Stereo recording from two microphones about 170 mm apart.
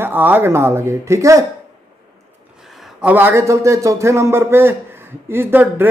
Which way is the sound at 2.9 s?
10° right (ahead or behind).